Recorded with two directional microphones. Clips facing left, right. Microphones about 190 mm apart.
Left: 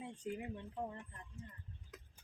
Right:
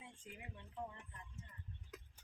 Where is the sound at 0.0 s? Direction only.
45° left (ahead or behind).